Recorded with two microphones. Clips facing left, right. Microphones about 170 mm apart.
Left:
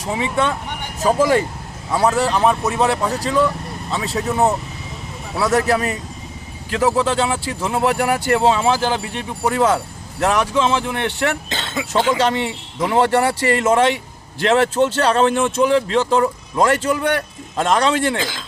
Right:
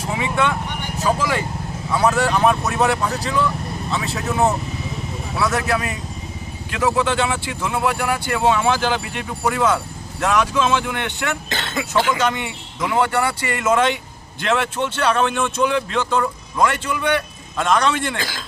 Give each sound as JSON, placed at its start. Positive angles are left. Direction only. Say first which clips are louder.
{"t": 0.2, "sound": "speech", "louder": "left 1 dB", "side_deg": 35}
{"t": 1.9, "sound": "speech", "louder": "left 1 dB", "side_deg": 30}
{"t": 11.4, "sound": "speech", "louder": "even", "side_deg": 20}
{"t": 12.1, "sound": "speech", "louder": "left 3 dB", "side_deg": 35}
{"t": 16.6, "sound": "speech", "louder": "left 3 dB", "side_deg": 40}
{"t": 18.2, "sound": "speech", "louder": "left 3 dB", "side_deg": 20}